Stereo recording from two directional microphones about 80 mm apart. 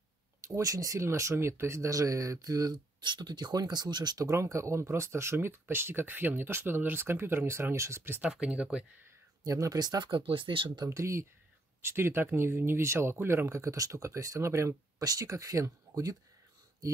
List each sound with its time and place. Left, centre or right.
0.6 s speech: right
3.0 s speech: right
4.2 s speech: right
8.2 s speech: centre
9.4 s speech: right
10.9 s speech: right